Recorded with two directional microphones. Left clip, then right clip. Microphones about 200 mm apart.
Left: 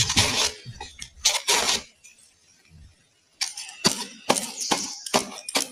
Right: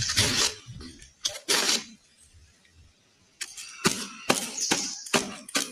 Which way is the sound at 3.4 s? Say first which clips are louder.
Left 4 dB; 25° right (ahead or behind).